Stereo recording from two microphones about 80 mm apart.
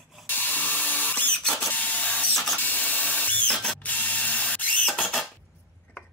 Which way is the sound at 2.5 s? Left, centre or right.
Left.